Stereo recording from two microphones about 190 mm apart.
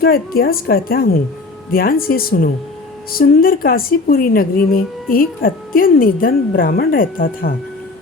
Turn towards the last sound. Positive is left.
turn(degrees=50)  # may be behind; listen again after turning